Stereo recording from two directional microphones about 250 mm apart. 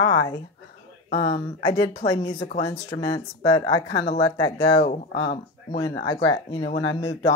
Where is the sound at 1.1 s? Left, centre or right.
Left.